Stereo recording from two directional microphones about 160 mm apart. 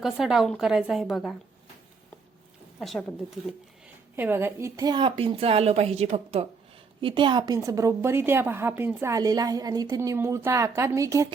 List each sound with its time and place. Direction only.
0.0 s a woman's voice: 5° right (ahead or behind)
2.8 s speech: centre (ahead or behind)
4.1 s a woman's voice: 15° right (ahead or behind)